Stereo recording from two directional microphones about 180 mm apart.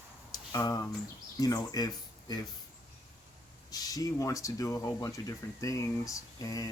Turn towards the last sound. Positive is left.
turn(degrees=20)  # may be behind; listen again after turning